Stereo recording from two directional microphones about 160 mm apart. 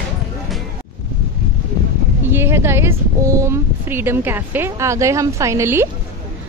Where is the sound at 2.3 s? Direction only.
15° right (ahead or behind).